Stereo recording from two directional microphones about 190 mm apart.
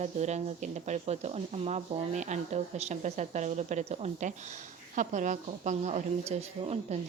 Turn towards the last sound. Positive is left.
turn(degrees=-35)  # may be behind; listen again after turning